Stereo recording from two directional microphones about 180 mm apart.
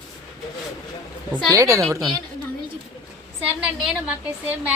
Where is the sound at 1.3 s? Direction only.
15° right (ahead or behind).